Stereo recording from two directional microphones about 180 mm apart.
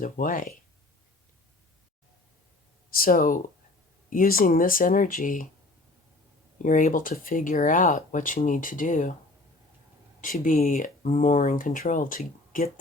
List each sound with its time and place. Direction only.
0.0 s speech: 50° left (ahead or behind)
2.9 s speech: 50° left (ahead or behind)
6.6 s speech: 45° left (ahead or behind)
10.3 s speech: 45° left (ahead or behind)